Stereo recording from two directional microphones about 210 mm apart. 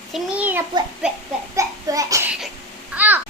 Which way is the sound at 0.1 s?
5° right (ahead or behind).